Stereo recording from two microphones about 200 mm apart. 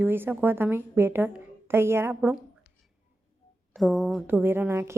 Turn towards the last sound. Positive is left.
turn(degrees=-15)  # may be behind; listen again after turning